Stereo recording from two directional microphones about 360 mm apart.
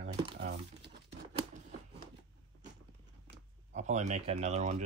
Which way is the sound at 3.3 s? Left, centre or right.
Centre.